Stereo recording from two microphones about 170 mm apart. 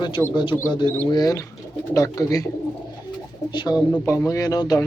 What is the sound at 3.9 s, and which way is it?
Speech, 15° left (ahead or behind).